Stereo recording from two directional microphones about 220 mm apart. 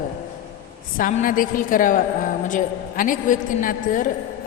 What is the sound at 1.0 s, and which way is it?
A woman's voice, 40° left (ahead or behind).